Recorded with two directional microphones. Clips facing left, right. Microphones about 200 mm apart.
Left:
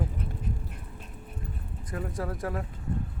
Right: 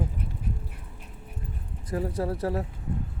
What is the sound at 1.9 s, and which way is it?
Speech, 30° right (ahead or behind).